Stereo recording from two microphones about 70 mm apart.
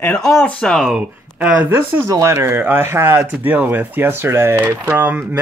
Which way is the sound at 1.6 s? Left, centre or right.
Right.